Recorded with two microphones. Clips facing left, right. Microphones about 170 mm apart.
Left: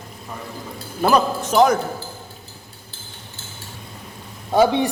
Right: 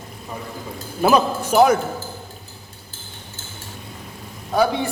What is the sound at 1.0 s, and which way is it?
Speech, 10° right (ahead or behind).